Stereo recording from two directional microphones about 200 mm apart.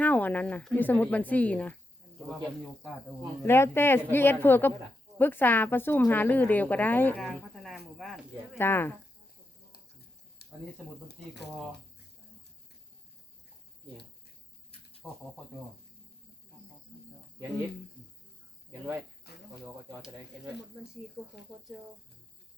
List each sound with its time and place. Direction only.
0.0 s a woman's voice: 10° left (ahead or behind)
3.4 s a woman's voice: 10° left (ahead or behind)
8.5 s a woman's voice: 10° left (ahead or behind)
14.7 s insect: 30° left (ahead or behind)
18.7 s speech: 15° right (ahead or behind)
19.3 s cricket: 50° left (ahead or behind)
19.6 s speech: 10° right (ahead or behind)